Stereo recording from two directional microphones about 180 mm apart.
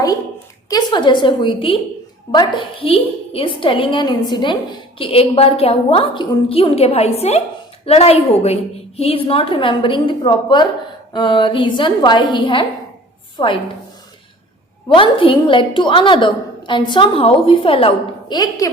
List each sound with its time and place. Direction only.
0.7 s a woman's voice: 25° left (ahead or behind)
14.9 s a woman's voice: 30° left (ahead or behind)